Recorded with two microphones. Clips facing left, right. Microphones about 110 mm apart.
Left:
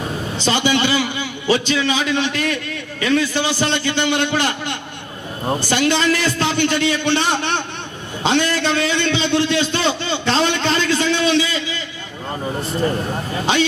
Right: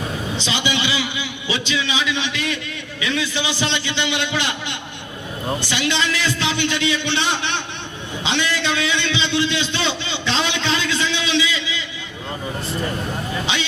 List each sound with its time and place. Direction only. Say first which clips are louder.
0.3 s a man's voice: left 7 dB; 45° left (ahead or behind)
8.2 s a sound: left 5 dB; 45° left (ahead or behind)
13.4 s a man's voice: left 10 dB; 45° left (ahead or behind)